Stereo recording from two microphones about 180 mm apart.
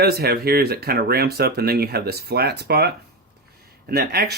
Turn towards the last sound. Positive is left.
turn(degrees=-60)  # may be behind; listen again after turning